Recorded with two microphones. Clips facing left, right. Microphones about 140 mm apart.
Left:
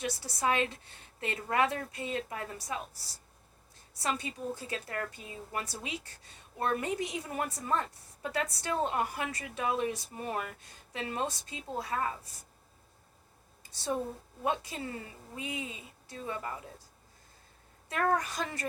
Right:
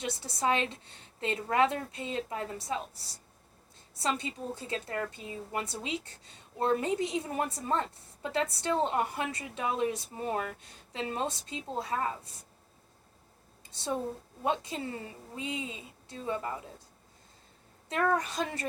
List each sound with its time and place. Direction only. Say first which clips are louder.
0.0 s a woman's voice: right 1 dB; 25° right (ahead or behind)
13.7 s a woman's voice: even; 25° right (ahead or behind)
18.1 s a woman's voice: right 1 dB; 25° right (ahead or behind)